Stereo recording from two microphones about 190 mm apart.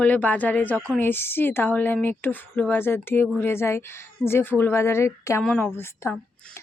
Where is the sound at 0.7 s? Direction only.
10° right (ahead or behind).